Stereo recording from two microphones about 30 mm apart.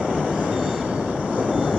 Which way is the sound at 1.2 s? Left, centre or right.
Right.